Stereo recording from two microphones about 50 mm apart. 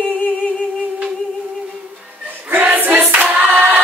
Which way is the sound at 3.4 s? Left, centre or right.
Right.